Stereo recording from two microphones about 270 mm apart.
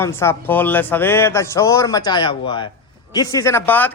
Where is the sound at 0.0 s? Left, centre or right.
Centre.